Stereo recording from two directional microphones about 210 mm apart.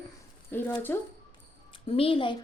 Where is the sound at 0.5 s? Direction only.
10° left (ahead or behind).